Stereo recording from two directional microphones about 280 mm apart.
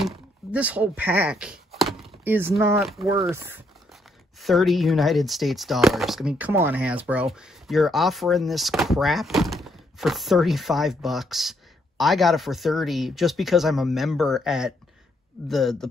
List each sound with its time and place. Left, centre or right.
0.0 s speech: centre